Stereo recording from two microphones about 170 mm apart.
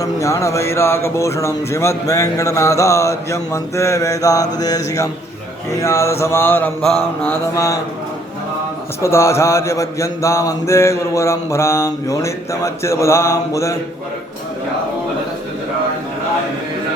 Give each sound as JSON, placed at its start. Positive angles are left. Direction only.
{"t": 0.0, "sound": "a man's voice", "side_deg": 20}
{"t": 9.0, "sound": "speech", "side_deg": 15}